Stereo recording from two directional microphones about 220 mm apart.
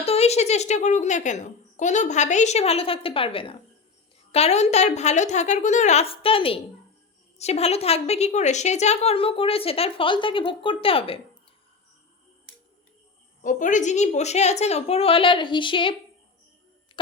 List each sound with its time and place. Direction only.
0.0 s a child's voice: 30° left (ahead or behind)
13.4 s a woman's voice: 35° left (ahead or behind)